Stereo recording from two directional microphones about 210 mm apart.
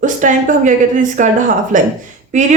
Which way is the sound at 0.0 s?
35° right (ahead or behind).